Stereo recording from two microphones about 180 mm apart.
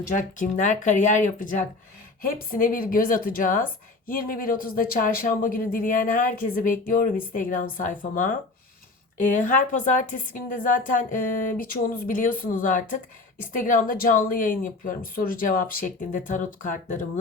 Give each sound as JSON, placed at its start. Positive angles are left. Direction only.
{"t": 0.1, "sound": "speech", "side_deg": 45}